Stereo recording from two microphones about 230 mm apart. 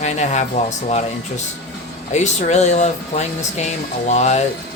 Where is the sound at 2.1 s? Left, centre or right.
Left.